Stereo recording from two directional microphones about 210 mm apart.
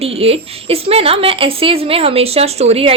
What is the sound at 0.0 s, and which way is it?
Speech, 30° right (ahead or behind).